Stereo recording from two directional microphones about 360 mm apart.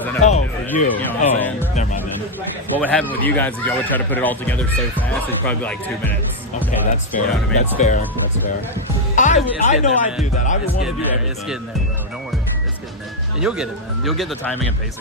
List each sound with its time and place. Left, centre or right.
0.2 s a sound: centre
0.9 s speech: centre
2.8 s speech: centre
6.9 s speech: left
9.1 s speech: centre
10.8 s speech: centre
13.4 s speech: centre